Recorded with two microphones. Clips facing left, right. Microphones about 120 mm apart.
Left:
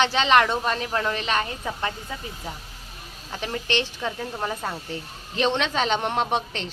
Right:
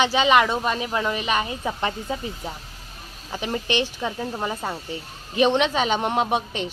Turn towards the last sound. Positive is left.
turn(degrees=-10)  # may be behind; listen again after turning